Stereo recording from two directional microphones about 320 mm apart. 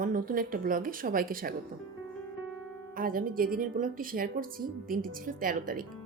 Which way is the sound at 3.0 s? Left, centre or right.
Right.